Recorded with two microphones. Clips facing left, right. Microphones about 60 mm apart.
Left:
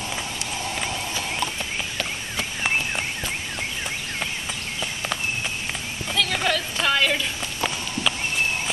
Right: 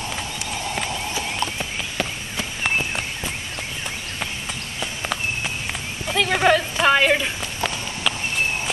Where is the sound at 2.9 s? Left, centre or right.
Centre.